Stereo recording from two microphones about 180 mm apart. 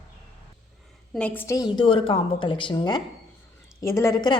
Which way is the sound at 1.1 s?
10° left (ahead or behind).